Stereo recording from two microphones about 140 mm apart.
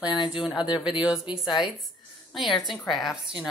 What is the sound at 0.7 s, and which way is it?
Speech, 35° left (ahead or behind).